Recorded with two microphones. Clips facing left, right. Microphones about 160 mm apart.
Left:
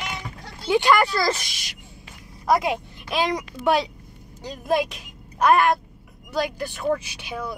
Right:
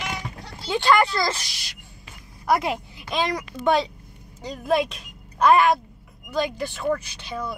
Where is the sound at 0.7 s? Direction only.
10° left (ahead or behind).